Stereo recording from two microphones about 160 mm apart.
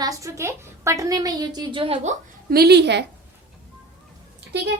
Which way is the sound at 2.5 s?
80° right.